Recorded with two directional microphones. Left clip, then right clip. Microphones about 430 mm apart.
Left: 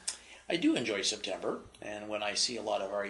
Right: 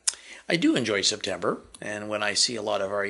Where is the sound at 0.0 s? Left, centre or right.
Right.